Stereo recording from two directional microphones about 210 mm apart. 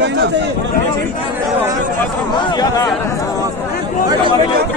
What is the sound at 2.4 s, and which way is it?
Speech, 20° left (ahead or behind).